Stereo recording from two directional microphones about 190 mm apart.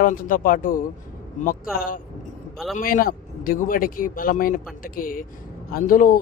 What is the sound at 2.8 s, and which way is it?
A man's voice, 50° left (ahead or behind).